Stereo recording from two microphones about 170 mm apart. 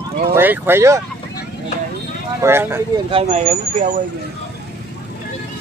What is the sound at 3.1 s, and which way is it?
Speech, 35° right (ahead or behind).